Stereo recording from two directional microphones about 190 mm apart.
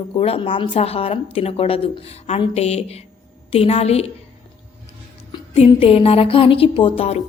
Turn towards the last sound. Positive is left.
turn(degrees=30)  # may be behind; listen again after turning